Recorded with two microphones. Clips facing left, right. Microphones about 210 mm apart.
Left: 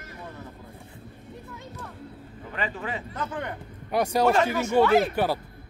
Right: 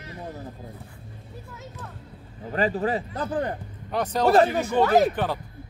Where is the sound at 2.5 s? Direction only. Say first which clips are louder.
Right 8 dB; 35° right (ahead or behind).